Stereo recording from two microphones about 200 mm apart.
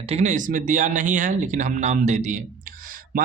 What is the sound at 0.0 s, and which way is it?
Speech, 35° right (ahead or behind).